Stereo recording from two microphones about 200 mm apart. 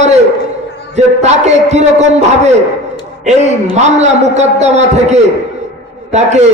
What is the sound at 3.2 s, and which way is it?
A man's voice, 35° right (ahead or behind).